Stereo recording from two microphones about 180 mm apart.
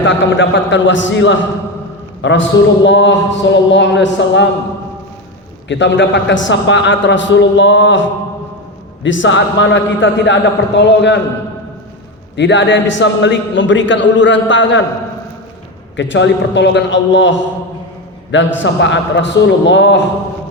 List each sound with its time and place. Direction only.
0.0 s a man's voice: 90° left
5.6 s a man's voice: 80° left
9.0 s a man's voice: 90° left
12.4 s a man's voice: 85° left
16.0 s a man's voice: 90° left